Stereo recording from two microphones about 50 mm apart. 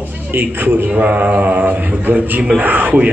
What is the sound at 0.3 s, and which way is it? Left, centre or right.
Speech, right.